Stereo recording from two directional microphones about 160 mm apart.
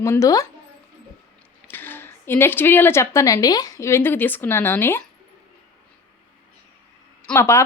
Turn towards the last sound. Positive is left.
turn(degrees=15)  # may be behind; listen again after turning